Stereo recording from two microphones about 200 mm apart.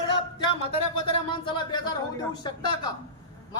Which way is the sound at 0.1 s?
25° left (ahead or behind).